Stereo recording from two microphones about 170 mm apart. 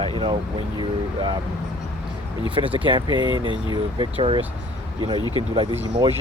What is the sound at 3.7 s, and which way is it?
Speech, 30° right (ahead or behind).